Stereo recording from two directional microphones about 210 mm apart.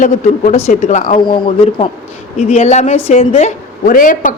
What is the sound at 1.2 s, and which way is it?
Speech, 20° left (ahead or behind).